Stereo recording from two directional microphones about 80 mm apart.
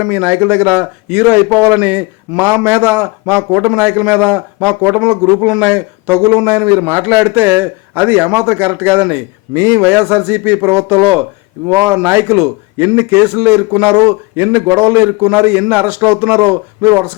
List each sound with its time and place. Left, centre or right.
0.0 s a man's voice: right
7.0 s a man's voice: right
9.6 s speech: right
9.8 s a man's voice: centre
11.7 s a man's voice: right